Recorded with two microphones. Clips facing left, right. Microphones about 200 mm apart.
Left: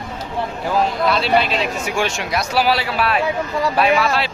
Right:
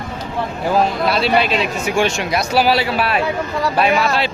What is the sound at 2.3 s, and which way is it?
Speech, centre (ahead or behind).